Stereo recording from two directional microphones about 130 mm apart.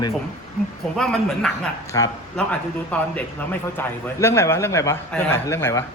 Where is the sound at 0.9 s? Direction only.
5° left (ahead or behind).